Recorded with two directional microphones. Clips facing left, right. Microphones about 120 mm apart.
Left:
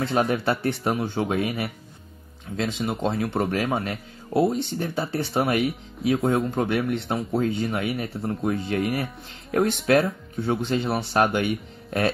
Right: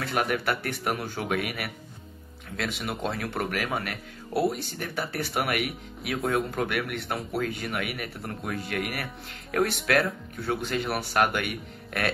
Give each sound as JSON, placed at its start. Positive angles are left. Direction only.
{"t": 0.0, "sound": "speech", "side_deg": 25}
{"t": 2.9, "sound": "speech", "side_deg": 25}